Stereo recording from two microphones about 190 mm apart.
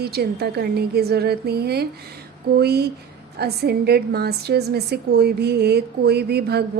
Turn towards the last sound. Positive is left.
turn(degrees=-60)  # may be behind; listen again after turning